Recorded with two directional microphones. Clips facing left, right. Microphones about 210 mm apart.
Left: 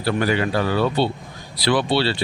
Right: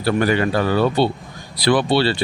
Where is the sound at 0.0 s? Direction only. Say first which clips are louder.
Right 3 dB; 45° right (ahead or behind).